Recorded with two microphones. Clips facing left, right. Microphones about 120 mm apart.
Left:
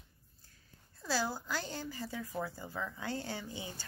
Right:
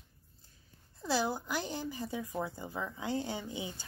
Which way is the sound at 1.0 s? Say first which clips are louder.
Right 3 dB; 20° right (ahead or behind).